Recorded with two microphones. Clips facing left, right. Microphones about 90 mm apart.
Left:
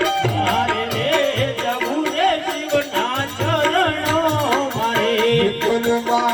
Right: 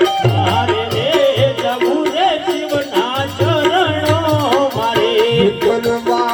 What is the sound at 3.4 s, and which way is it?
Music, 80° right.